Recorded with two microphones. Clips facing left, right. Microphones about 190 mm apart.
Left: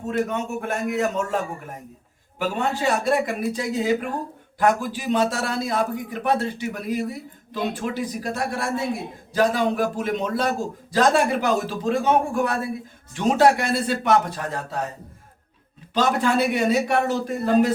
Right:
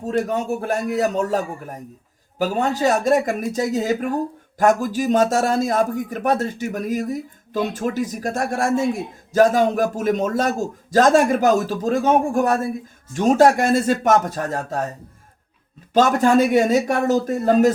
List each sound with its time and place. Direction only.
0.0 s a man's voice: 35° right (ahead or behind)
15.9 s speech: 45° right (ahead or behind)